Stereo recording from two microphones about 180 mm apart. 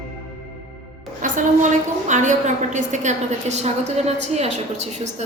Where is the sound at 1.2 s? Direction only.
45° right (ahead or behind).